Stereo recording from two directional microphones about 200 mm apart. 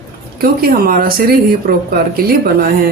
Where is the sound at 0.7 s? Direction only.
45° right (ahead or behind).